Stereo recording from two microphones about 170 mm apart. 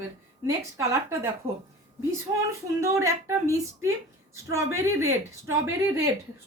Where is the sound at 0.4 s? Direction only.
15° right (ahead or behind).